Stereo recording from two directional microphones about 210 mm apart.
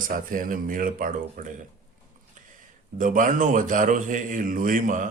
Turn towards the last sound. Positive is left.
turn(degrees=-40)  # may be behind; listen again after turning